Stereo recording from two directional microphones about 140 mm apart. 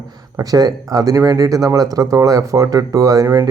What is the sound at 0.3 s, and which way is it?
Speech, 25° right (ahead or behind).